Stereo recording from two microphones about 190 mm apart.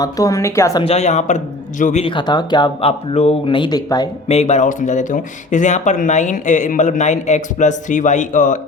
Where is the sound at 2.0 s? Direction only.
25° left (ahead or behind).